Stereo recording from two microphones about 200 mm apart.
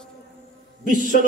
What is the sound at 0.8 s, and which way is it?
Speech, 40° right (ahead or behind).